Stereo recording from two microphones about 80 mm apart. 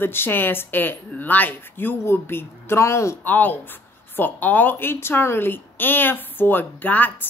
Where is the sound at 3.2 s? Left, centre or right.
Left.